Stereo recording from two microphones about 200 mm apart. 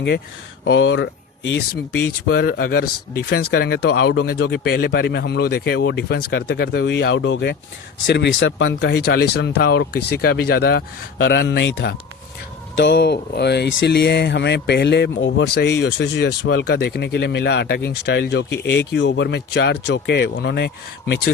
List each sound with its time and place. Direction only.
0.6 s speech: 60° left (ahead or behind)